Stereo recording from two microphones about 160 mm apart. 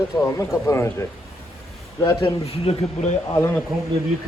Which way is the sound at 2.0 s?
30° left (ahead or behind).